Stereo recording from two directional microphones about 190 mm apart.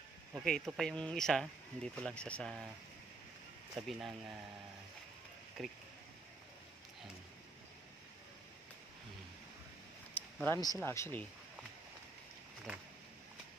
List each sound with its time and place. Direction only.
0.3 s speech: centre (ahead or behind)
3.8 s speech: centre (ahead or behind)
5.6 s speech: centre (ahead or behind)
10.1 s a sound: 10° left (ahead or behind)
10.8 s speech: 10° left (ahead or behind)